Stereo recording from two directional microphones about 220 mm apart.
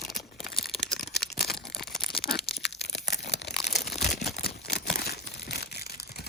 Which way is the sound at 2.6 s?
50° left (ahead or behind).